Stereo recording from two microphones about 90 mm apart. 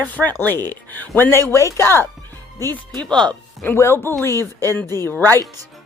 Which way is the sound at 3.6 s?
25° left (ahead or behind).